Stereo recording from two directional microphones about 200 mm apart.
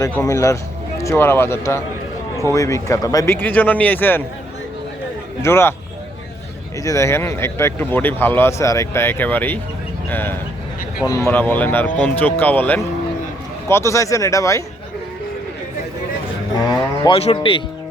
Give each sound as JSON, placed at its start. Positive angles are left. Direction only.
{"t": 0.2, "sound": "speech", "side_deg": 15}
{"t": 5.4, "sound": "speech", "side_deg": 10}
{"t": 6.8, "sound": "speech", "side_deg": 15}
{"t": 16.6, "sound": "a sound", "side_deg": 20}
{"t": 17.2, "sound": "speech", "side_deg": 25}